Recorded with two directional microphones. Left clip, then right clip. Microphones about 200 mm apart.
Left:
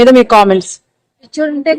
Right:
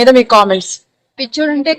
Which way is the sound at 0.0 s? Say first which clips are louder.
Left 1 dB; 55° left (ahead or behind).